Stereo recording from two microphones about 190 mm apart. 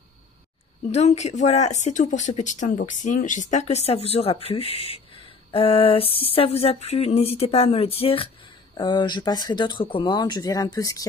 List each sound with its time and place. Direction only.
0.9 s speech: 35° left (ahead or behind); by 11.1 s 20° left (ahead or behind)